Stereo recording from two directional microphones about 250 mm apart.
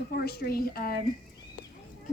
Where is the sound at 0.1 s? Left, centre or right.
Left.